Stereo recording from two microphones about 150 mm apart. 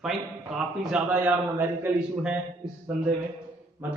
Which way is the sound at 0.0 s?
5° right (ahead or behind).